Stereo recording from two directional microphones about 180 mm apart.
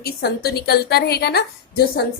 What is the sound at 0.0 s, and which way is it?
A woman's voice, 60° left (ahead or behind).